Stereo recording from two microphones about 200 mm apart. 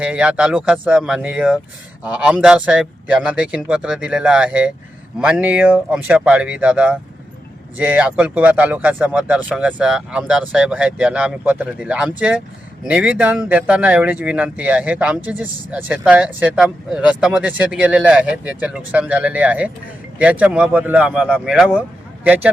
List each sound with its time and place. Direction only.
0.0 s speech: 5° right (ahead or behind)